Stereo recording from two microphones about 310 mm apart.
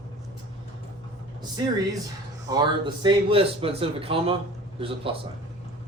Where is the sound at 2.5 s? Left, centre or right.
Centre.